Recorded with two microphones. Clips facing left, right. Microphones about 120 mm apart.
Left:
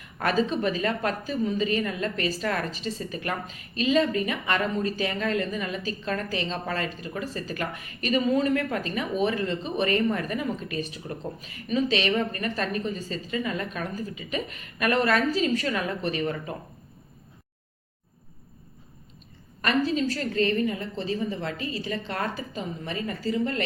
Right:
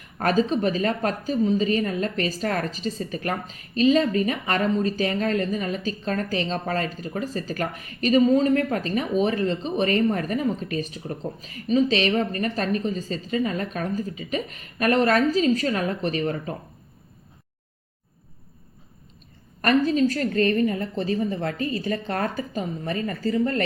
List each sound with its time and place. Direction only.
0.2 s speech: 40° right (ahead or behind)
19.6 s a woman's voice: 45° right (ahead or behind)